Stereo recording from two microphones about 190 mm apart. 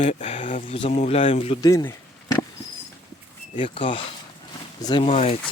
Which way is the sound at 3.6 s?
25° left (ahead or behind).